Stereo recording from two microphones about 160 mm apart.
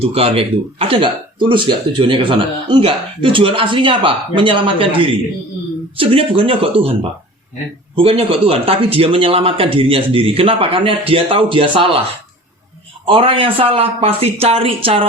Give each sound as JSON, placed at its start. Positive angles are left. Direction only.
{"t": 0.0, "sound": "a man's voice", "side_deg": -40}
{"t": 7.9, "sound": "a man's voice", "side_deg": -35}
{"t": 13.1, "sound": "a man's voice", "side_deg": -35}